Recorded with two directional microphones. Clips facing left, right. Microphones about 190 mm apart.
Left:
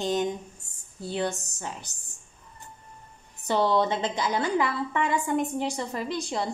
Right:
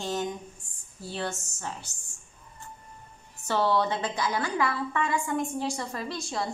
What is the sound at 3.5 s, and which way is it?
A woman's voice, 20° left (ahead or behind).